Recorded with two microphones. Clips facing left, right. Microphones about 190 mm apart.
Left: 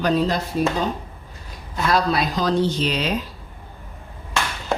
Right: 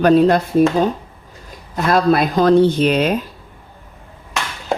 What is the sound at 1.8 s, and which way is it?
Speech, 50° right (ahead or behind).